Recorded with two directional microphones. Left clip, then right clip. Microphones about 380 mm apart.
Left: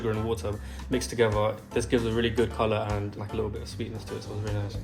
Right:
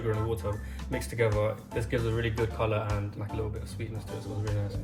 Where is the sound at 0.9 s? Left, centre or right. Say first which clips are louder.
Left 4 dB; centre.